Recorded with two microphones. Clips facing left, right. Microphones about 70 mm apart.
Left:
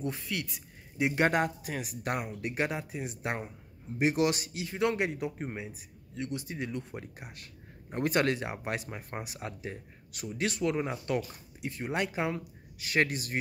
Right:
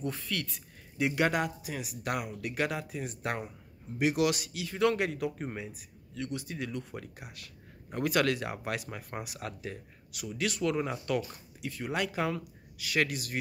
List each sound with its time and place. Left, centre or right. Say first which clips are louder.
0.0 s a man's voice: even; left
1.2 s speech: left 3 dB; left